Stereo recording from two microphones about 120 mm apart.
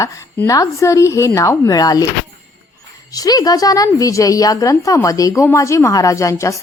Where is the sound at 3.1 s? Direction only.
30° left (ahead or behind).